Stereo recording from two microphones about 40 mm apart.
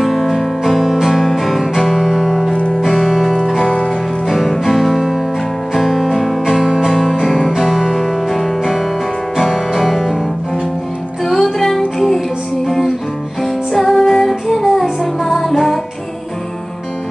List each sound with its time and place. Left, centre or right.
0.0 s music: centre
2.5 s music: left
2.8 s music: centre
6.4 s music: centre
11.2 s music: centre
13.4 s music: centre